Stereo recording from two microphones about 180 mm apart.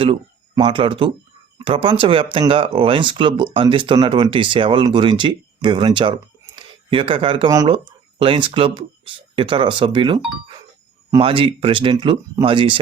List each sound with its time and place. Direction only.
0.0 s speech: 30° right (ahead or behind)
11.2 s speech: 30° right (ahead or behind)